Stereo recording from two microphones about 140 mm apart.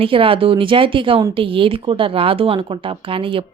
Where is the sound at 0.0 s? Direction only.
40° right (ahead or behind).